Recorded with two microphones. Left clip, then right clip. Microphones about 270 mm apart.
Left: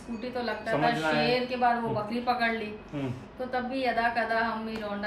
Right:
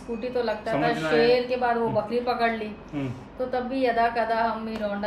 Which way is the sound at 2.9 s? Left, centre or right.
Centre.